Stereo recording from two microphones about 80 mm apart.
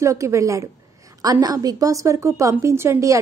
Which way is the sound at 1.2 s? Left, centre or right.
Right.